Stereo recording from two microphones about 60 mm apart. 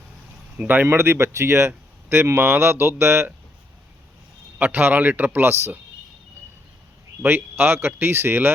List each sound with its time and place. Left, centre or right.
0.5 s speech: right
0.9 s speech: right
4.5 s speech: right
5.5 s speech: right
7.2 s speech: right